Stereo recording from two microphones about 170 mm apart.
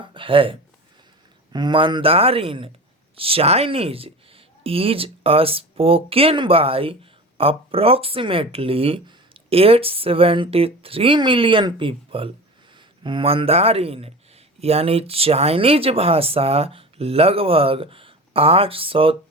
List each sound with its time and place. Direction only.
0.0 s speech: 30° right (ahead or behind)